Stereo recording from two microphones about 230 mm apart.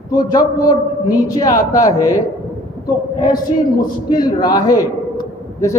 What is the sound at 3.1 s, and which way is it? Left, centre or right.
A man's voice, centre.